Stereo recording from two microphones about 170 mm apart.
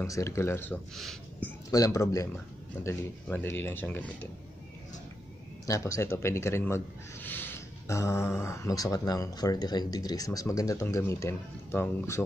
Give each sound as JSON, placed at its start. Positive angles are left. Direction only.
{"t": 0.0, "sound": "speech", "side_deg": 20}
{"t": 0.9, "sound": "speech", "side_deg": 0}
{"t": 1.7, "sound": "speech", "side_deg": 20}
{"t": 5.7, "sound": "speech", "side_deg": 20}